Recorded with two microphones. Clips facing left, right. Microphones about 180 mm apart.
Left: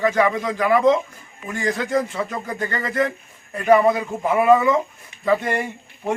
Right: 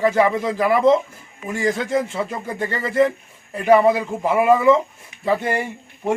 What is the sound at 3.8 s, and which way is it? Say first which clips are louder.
Speech: right 1 dB; 10° right (ahead or behind).